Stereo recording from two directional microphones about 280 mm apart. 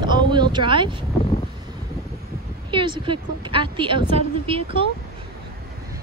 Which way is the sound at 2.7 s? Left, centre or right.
Centre.